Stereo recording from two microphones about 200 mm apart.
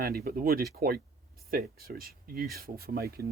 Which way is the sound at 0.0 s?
50° right (ahead or behind).